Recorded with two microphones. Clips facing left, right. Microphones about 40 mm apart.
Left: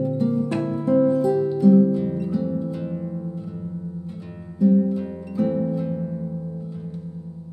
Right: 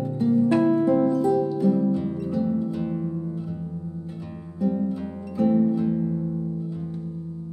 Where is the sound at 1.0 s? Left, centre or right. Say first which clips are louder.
Left 2 dB; left.